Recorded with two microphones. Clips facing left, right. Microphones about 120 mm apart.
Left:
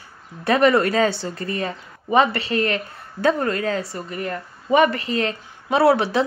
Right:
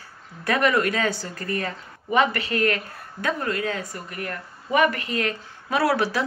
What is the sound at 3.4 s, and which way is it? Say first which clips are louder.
Speech: left 4 dB; 35° left (ahead or behind).